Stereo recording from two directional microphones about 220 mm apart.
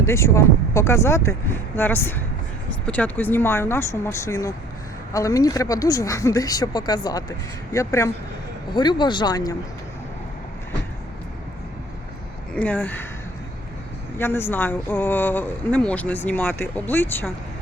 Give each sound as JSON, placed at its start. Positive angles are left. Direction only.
{"t": 0.0, "sound": "speech", "side_deg": 10}
{"t": 12.5, "sound": "speech", "side_deg": 5}
{"t": 14.2, "sound": "speech", "side_deg": 10}